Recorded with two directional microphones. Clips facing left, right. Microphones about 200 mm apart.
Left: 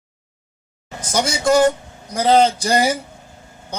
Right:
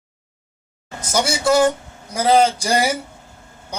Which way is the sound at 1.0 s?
10° right (ahead or behind).